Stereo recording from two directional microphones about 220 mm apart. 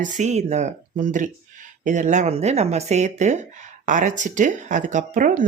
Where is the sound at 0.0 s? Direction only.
30° right (ahead or behind).